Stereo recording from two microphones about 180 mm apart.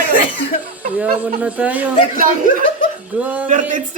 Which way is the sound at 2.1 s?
50° right (ahead or behind).